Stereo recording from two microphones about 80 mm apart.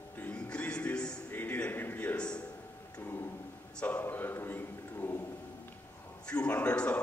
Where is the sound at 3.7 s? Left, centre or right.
Centre.